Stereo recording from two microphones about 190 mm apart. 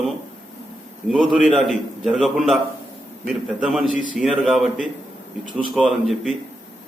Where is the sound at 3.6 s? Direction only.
Centre (ahead or behind).